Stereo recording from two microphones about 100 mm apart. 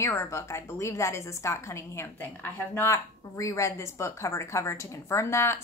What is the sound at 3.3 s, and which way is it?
A woman's voice, 30° left (ahead or behind).